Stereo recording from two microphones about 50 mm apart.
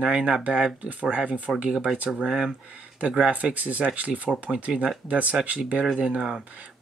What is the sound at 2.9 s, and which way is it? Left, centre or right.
Speech, right.